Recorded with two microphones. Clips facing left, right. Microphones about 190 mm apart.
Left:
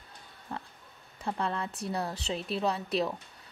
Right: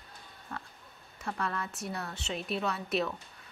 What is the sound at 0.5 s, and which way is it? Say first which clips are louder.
Pig: left 3 dB; 30° left (ahead or behind).